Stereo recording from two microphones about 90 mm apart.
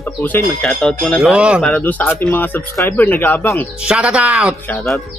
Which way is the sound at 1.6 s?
15° left (ahead or behind).